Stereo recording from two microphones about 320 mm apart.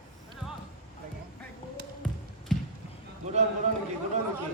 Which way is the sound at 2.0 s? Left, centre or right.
Centre.